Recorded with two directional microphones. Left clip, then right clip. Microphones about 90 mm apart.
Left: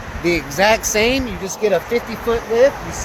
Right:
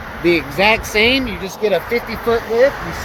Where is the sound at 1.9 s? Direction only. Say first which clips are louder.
Right 1 dB; 65° right (ahead or behind).